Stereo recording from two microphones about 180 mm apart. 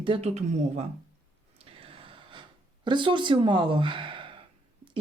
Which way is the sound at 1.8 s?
30° right (ahead or behind).